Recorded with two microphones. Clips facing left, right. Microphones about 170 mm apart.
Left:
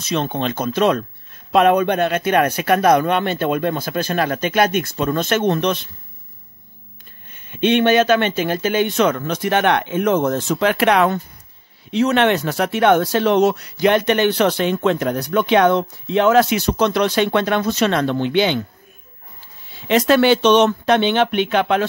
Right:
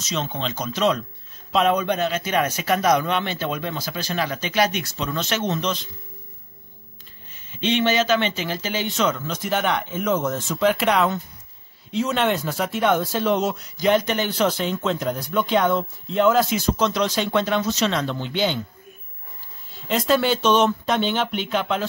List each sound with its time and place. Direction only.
0.0 s a man's voice: 55° left (ahead or behind)
7.3 s a man's voice: 55° left (ahead or behind)
19.7 s speech: 75° left (ahead or behind)